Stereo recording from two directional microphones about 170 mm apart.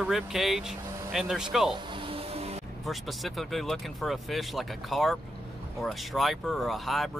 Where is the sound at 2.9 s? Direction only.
Centre (ahead or behind).